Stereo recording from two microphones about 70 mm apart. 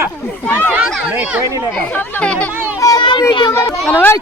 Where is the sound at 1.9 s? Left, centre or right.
Left.